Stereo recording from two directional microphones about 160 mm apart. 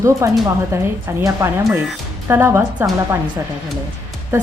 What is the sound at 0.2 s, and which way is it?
A woman's voice, 20° right (ahead or behind).